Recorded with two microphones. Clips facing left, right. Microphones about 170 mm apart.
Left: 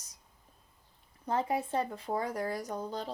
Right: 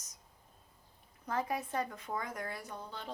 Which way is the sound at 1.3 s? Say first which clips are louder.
Left 5 dB; 30° left (ahead or behind).